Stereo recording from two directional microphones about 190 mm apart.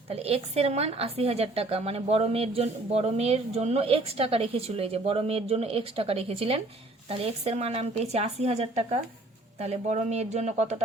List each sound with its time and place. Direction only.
0.1 s a woman's voice: 30° right (ahead or behind)